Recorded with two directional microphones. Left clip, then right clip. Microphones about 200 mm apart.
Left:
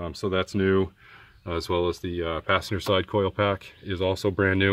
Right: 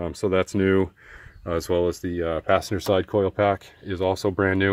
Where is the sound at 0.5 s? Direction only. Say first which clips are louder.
Right 2 dB; 15° right (ahead or behind); by 4.7 s centre (ahead or behind).